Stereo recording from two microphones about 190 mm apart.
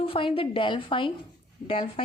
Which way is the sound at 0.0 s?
30° left (ahead or behind).